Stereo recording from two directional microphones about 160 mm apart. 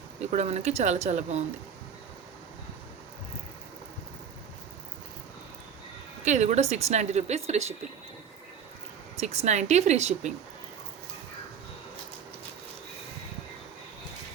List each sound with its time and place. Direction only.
0.2 s a woman's voice: 45° right (ahead or behind)
6.2 s a woman's voice: 45° right (ahead or behind)
9.2 s a woman's voice: 45° right (ahead or behind)